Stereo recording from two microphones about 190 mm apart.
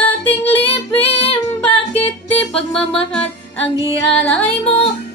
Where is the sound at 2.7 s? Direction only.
5° left (ahead or behind).